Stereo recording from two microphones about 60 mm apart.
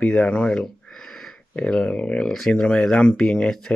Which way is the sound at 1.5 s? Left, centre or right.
Centre.